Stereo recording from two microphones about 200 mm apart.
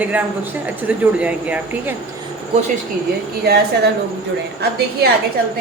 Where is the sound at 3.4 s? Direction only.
55° right (ahead or behind).